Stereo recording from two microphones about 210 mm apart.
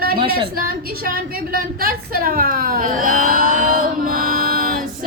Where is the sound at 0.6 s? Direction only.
45° right (ahead or behind).